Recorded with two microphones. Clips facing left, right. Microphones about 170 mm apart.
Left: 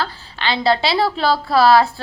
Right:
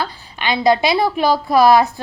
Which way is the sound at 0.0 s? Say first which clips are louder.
Even; 15° right (ahead or behind).